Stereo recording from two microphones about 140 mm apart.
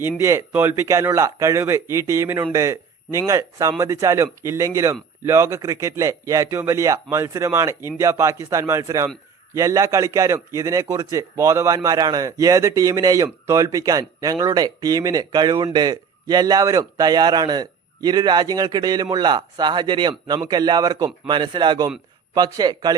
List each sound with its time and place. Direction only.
0.2 s a man's voice: 20° right (ahead or behind)